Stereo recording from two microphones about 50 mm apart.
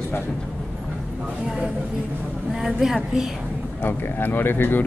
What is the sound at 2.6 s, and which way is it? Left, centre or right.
Speech, centre.